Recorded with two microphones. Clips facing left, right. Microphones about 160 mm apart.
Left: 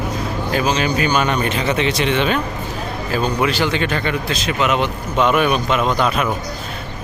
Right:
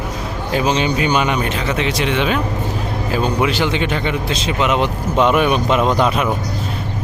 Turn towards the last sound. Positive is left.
turn(degrees=-25)  # may be behind; listen again after turning